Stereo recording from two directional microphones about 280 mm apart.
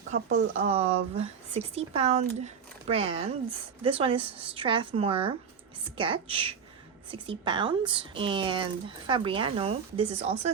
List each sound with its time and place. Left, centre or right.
0.6 s speech: right